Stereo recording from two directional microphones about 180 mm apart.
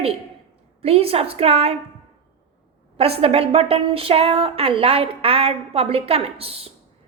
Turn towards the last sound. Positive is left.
turn(degrees=-35)  # may be behind; listen again after turning